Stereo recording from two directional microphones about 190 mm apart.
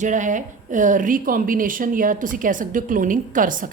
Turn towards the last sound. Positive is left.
turn(degrees=-45)  # may be behind; listen again after turning